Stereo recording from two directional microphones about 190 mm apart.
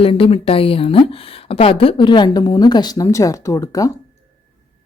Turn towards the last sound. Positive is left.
turn(degrees=20)  # may be behind; listen again after turning